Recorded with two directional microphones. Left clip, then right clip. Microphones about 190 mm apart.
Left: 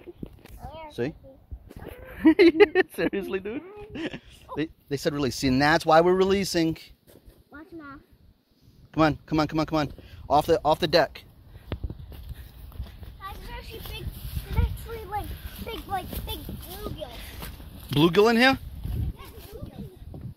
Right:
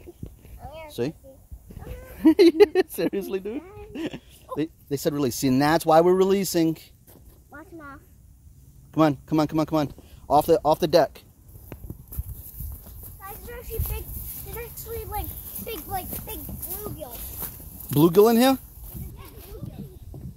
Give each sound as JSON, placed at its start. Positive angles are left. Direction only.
{"t": 1.0, "sound": "speech", "side_deg": -35}
{"t": 2.1, "sound": "a woman's voice", "side_deg": -35}
{"t": 8.9, "sound": "a woman's voice", "side_deg": -30}
{"t": 17.4, "sound": "zipper", "side_deg": 50}
{"t": 18.0, "sound": "speech", "side_deg": -30}
{"t": 20.1, "sound": "a sound", "side_deg": 50}